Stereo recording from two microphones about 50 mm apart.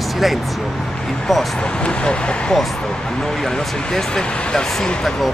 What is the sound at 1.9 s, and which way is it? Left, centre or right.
Speech, left.